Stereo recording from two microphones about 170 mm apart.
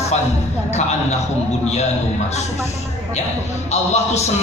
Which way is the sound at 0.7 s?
40° left (ahead or behind).